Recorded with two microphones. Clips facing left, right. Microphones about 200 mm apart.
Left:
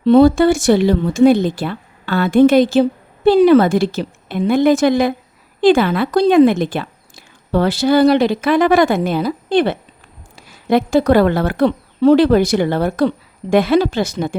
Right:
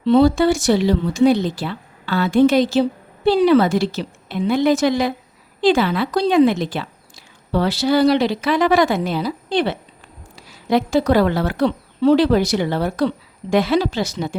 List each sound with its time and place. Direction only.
0.0 s speech: 50° left (ahead or behind)